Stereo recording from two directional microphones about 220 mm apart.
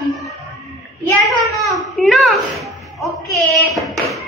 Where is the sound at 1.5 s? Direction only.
Centre (ahead or behind).